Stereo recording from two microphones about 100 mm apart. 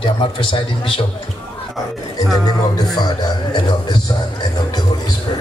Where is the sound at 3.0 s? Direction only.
45° left (ahead or behind).